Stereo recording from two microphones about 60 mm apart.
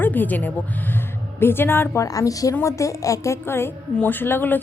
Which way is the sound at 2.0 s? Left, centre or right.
Left.